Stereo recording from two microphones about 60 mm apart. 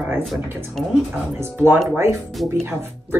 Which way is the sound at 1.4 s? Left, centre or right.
Right.